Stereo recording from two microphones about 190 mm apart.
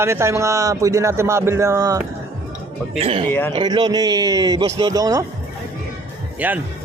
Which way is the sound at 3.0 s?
30° right (ahead or behind).